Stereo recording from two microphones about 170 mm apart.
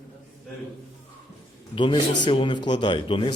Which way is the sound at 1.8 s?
25° left (ahead or behind).